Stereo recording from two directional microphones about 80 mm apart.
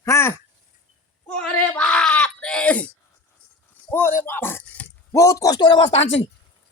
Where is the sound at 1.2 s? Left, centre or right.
Centre.